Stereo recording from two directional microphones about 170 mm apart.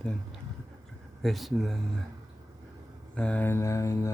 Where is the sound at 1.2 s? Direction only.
Centre (ahead or behind).